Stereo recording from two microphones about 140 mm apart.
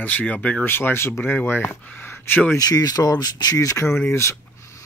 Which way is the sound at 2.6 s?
25° left (ahead or behind).